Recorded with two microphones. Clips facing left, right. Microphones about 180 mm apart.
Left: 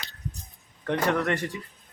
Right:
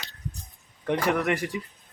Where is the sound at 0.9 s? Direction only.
10° right (ahead or behind).